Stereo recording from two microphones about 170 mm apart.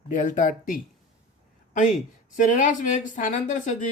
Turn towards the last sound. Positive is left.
turn(degrees=45)  # may be behind; listen again after turning